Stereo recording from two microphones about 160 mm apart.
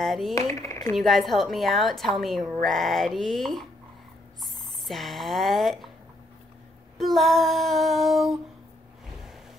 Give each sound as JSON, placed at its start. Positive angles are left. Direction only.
{"t": 0.0, "sound": "speech", "side_deg": 0}
{"t": 0.3, "sound": "speech", "side_deg": 20}
{"t": 0.9, "sound": "a woman's voice", "side_deg": 0}
{"t": 7.0, "sound": "a woman's voice", "side_deg": 0}